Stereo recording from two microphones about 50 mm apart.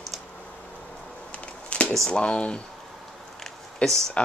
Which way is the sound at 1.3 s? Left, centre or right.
Left.